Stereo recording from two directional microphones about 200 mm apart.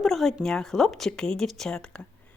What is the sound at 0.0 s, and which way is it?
A woman's voice, centre (ahead or behind).